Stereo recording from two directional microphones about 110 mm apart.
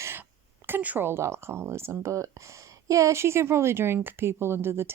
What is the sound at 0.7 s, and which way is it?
Speech, 15° right (ahead or behind).